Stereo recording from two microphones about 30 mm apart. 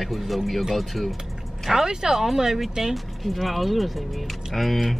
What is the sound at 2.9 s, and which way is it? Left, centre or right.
Speech, centre.